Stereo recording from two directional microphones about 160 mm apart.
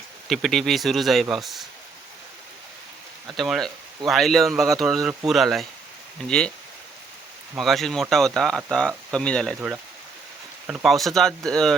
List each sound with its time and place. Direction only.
0.3 s speech: centre (ahead or behind)
3.2 s speech: centre (ahead or behind)
7.6 s speech: centre (ahead or behind)
10.7 s speech: centre (ahead or behind)